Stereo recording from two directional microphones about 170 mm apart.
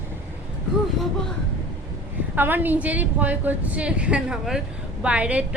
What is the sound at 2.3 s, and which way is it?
A woman's voice, 10° right (ahead or behind).